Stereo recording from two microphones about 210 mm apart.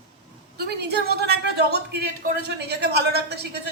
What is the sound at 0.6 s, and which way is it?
A man's voice, 50° right (ahead or behind).